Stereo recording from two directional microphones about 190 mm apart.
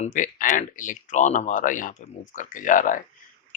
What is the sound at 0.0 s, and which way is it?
Speech, 40° left (ahead or behind).